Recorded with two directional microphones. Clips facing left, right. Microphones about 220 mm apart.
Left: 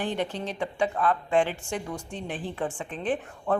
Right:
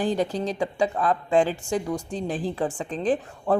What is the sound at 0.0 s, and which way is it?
A woman's voice, 35° right (ahead or behind).